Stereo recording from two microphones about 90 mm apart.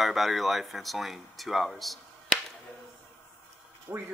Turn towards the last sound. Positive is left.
turn(degrees=-30)  # may be behind; listen again after turning